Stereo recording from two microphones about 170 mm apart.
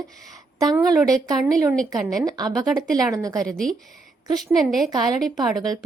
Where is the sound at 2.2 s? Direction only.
20° right (ahead or behind).